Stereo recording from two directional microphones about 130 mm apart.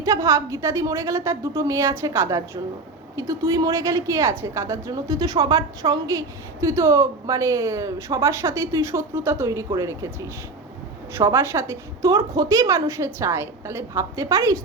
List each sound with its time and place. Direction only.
0.0 s a woman's voice: 25° right (ahead or behind)